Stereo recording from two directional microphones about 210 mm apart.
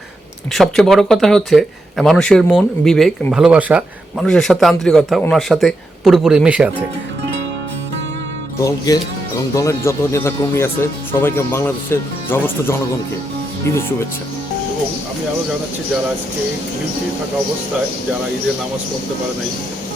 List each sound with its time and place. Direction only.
0.5 s speech: centre (ahead or behind)
8.9 s speech: 15° left (ahead or behind)